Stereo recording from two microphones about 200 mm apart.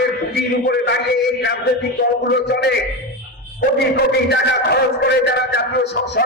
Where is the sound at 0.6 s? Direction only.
60° left (ahead or behind).